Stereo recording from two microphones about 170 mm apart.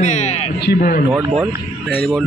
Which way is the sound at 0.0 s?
40° left (ahead or behind).